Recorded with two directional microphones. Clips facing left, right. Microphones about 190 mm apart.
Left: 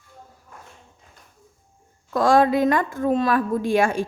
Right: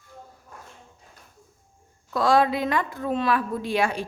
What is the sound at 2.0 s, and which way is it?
A woman's voice, 45° left (ahead or behind).